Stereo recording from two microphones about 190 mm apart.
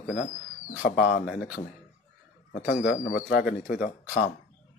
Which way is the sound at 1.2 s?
5° right (ahead or behind).